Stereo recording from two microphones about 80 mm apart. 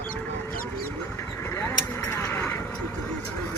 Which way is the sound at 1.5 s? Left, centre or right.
Left.